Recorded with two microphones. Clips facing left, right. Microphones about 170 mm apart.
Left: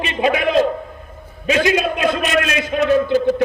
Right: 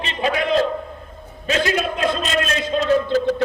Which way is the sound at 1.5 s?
15° left (ahead or behind).